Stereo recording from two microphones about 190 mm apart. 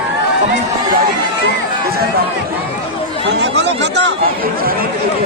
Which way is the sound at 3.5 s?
65° right (ahead or behind).